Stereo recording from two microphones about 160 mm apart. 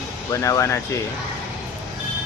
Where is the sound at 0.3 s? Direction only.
20° left (ahead or behind).